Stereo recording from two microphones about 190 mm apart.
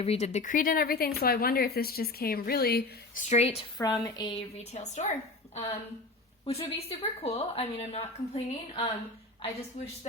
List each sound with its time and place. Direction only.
0.0 s a woman's voice: 35° left (ahead or behind); by 3.2 s 55° left (ahead or behind)
3.2 s speech: 35° left (ahead or behind)
3.8 s a woman's voice: 15° left (ahead or behind)
4.5 s speech: 35° left (ahead or behind)
6.4 s speech: 30° left (ahead or behind)